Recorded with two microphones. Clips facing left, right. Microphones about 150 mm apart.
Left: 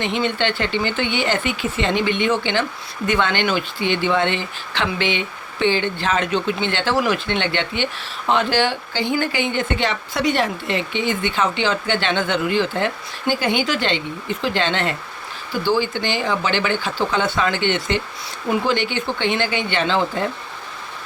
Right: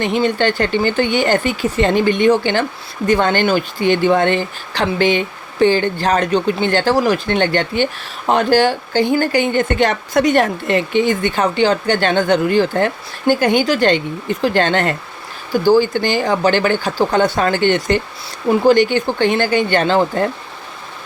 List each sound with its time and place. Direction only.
0.0 s speech: 40° right (ahead or behind)